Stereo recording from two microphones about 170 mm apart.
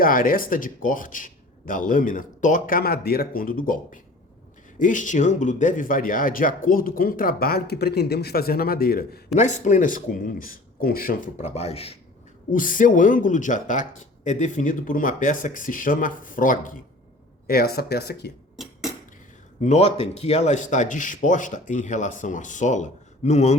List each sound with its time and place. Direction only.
0.0 s speech: 55° left (ahead or behind)
9.3 s speech: 45° left (ahead or behind)
12.5 s speech: 50° left (ahead or behind); by 18.3 s 70° left (ahead or behind)
18.5 s a sound: centre (ahead or behind)
19.6 s speech: 40° left (ahead or behind)